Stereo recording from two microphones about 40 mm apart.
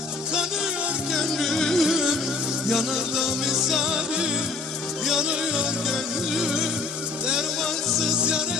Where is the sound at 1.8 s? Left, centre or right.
Centre.